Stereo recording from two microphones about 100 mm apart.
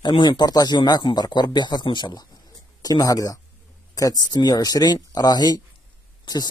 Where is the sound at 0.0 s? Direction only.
50° left (ahead or behind).